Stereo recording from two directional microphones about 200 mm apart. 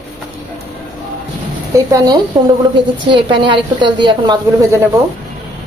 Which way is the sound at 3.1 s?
25° right (ahead or behind).